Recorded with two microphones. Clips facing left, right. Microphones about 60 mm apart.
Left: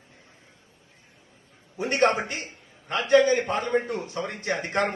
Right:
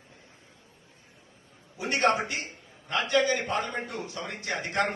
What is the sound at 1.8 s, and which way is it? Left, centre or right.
A man's voice, left.